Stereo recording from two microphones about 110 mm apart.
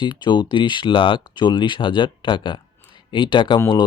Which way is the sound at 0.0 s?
45° left (ahead or behind).